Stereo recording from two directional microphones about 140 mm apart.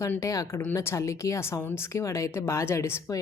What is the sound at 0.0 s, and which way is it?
A woman's voice, 20° left (ahead or behind).